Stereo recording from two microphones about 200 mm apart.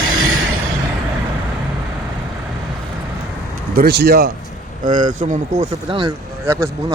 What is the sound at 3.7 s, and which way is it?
Speech, 55° right (ahead or behind).